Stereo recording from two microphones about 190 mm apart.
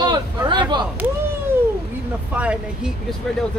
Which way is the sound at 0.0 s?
20° right (ahead or behind).